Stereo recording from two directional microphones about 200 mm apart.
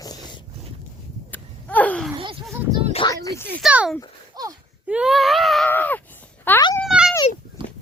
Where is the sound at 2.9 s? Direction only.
25° left (ahead or behind).